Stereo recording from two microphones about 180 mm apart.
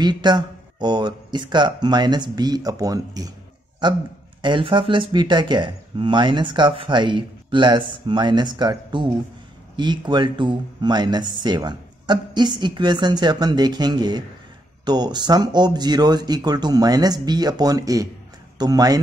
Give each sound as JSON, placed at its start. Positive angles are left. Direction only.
{"t": 0.0, "sound": "speech", "side_deg": -25}